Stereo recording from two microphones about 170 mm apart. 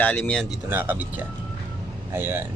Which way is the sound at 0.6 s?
10° right (ahead or behind).